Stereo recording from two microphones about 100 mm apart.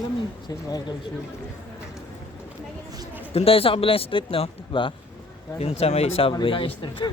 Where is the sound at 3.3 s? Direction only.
75° left (ahead or behind); by 4.9 s 60° left (ahead or behind).